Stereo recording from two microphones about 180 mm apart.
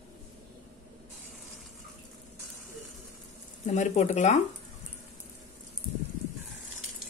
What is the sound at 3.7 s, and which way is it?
Speech, 40° left (ahead or behind).